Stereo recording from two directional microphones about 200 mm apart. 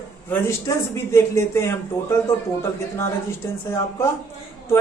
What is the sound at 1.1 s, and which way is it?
A man's voice, 15° left (ahead or behind).